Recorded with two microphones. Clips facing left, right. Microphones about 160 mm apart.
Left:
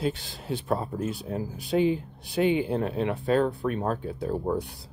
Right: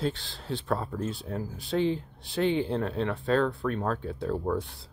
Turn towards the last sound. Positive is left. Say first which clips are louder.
# left 1 dB
turn(degrees=15)  # may be behind; listen again after turning